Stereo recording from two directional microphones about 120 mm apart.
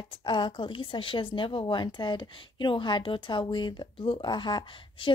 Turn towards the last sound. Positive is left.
turn(degrees=45)  # may be behind; listen again after turning